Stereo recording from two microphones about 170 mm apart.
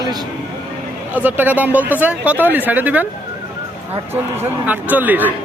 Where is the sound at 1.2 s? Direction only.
10° right (ahead or behind).